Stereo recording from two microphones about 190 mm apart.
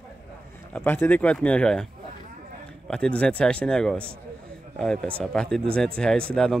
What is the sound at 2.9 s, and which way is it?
Speech, 5° left (ahead or behind).